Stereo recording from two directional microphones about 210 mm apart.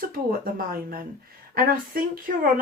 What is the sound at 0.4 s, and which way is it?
A woman's voice, 45° right (ahead or behind).